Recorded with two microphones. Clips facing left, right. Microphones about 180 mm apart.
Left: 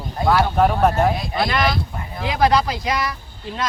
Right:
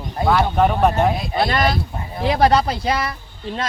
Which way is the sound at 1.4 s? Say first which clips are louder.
Right 3 dB; 35° right (ahead or behind).